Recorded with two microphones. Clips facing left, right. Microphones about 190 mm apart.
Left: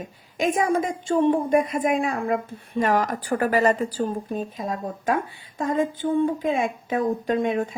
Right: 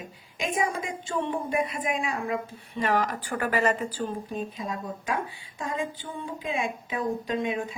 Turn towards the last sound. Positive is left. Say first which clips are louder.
# left 6 dB
turn(degrees=50)  # may be behind; listen again after turning